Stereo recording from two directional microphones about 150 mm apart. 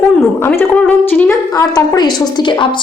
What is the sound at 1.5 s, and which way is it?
A woman's voice, 25° left (ahead or behind).